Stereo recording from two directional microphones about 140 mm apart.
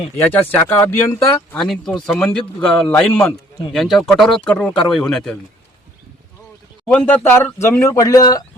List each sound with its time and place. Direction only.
0.2 s speech: 10° left (ahead or behind)
1.5 s speech: centre (ahead or behind)
6.8 s speech: 10° left (ahead or behind); by 8.4 s 25° left (ahead or behind)